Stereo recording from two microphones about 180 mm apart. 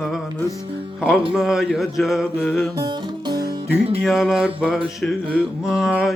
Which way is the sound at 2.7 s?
20° right (ahead or behind).